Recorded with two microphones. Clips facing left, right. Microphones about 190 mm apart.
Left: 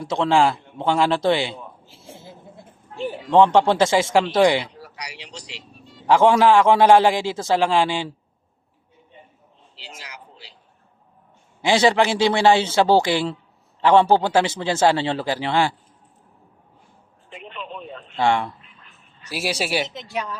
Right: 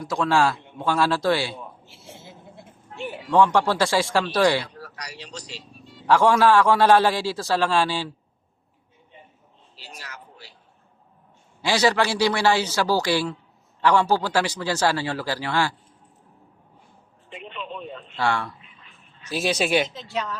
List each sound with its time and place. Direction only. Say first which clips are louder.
0.0 s speech: left 3 dB; 25° left (ahead or behind)
2.9 s a sound: left 5 dB; 35° left (ahead or behind)
3.2 s speech: left 4 dB; 20° left (ahead or behind)
9.7 s a sound: left 1 dB; 20° left (ahead or behind)
11.6 s speech: left 4 dB; 20° left (ahead or behind)
17.2 s a sound: even; centre (ahead or behind)
18.2 s speech: left 5 dB; 20° left (ahead or behind)
18.9 s quack: right 3 dB; 10° left (ahead or behind)
19.9 s a woman's voice: even; 15° left (ahead or behind)